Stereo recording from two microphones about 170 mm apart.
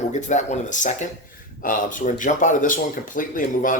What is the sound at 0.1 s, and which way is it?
Speech, 45° left (ahead or behind).